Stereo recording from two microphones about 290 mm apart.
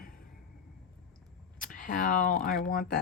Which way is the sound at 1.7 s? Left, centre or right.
Left.